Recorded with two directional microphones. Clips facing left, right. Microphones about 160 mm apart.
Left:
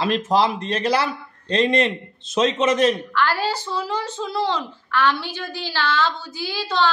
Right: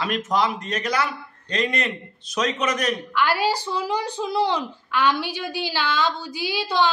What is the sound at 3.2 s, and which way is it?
Speech, 15° right (ahead or behind).